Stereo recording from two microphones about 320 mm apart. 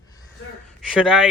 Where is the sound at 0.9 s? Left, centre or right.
Centre.